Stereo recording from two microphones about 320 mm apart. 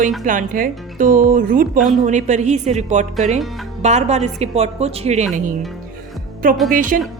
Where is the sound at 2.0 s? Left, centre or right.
Right.